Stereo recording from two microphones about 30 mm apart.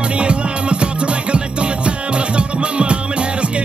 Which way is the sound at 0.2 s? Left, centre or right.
Right.